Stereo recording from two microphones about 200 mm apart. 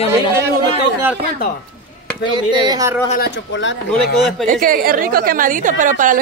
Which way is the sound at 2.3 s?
20° right (ahead or behind).